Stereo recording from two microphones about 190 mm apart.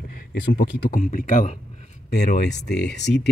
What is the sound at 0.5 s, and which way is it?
Speech, 50° left (ahead or behind).